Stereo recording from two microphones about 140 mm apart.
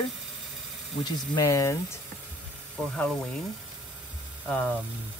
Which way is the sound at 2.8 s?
10° left (ahead or behind).